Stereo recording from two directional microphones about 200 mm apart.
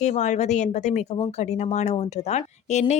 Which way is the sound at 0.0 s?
35° left (ahead or behind).